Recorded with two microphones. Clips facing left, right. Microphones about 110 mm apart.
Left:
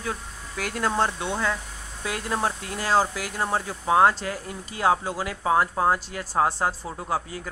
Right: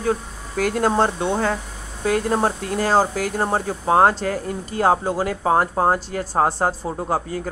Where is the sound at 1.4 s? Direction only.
45° right (ahead or behind).